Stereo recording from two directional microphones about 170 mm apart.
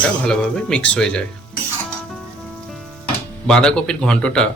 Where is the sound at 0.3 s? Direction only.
5° left (ahead or behind).